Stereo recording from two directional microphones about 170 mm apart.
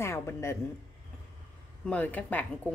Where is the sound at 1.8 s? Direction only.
10° left (ahead or behind).